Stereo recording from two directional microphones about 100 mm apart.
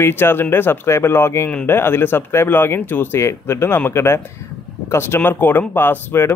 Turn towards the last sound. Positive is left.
turn(degrees=20)  # may be behind; listen again after turning